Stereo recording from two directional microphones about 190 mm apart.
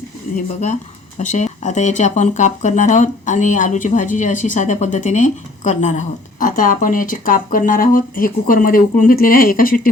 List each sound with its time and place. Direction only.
1.2 s speech: 40° left (ahead or behind)